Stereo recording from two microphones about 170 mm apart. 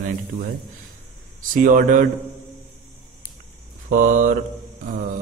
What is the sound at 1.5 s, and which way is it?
Speech, 50° right (ahead or behind).